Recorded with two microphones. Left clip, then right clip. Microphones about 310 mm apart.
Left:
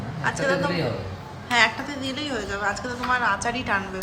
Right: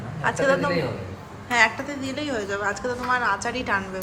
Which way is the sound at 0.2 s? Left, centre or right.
Centre.